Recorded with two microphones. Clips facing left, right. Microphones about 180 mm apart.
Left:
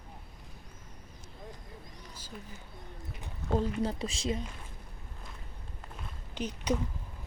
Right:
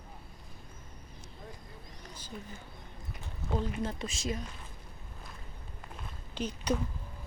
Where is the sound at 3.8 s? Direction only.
35° left (ahead or behind).